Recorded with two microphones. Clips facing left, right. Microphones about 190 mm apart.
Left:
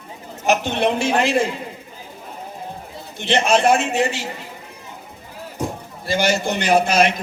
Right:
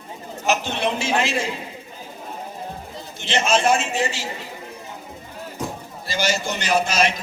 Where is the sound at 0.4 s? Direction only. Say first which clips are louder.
Left 4 dB; 55° left (ahead or behind).